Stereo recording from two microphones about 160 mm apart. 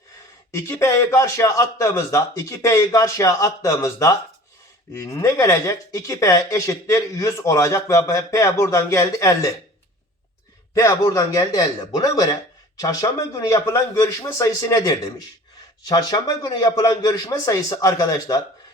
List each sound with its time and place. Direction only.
0.5 s speech: 20° left (ahead or behind)
10.8 s speech: 20° left (ahead or behind)